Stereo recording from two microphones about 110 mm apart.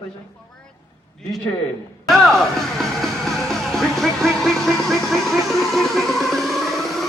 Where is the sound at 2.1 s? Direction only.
Centre (ahead or behind).